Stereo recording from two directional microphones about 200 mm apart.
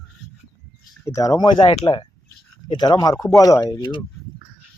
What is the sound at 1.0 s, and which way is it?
Speech, 15° left (ahead or behind).